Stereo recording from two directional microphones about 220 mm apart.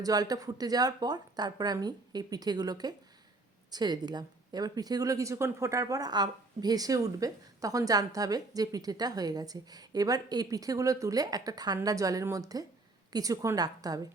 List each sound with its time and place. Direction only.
0.0 s a woman's voice: 15° right (ahead or behind)